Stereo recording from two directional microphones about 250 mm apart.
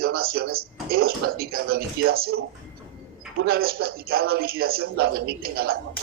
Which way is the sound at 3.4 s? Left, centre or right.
Right.